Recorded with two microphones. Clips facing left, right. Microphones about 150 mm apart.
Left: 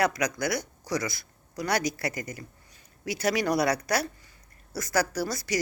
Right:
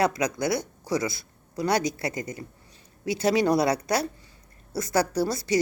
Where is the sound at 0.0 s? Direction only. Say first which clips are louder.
Right 2 dB; 25° right (ahead or behind).